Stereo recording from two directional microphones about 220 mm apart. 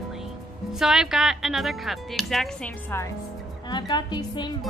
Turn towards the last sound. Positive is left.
turn(degrees=20)  # may be behind; listen again after turning